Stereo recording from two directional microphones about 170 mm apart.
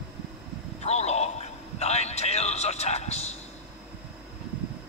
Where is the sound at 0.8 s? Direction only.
40° left (ahead or behind).